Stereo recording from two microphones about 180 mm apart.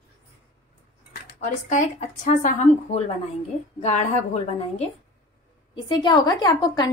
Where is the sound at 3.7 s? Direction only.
40° left (ahead or behind).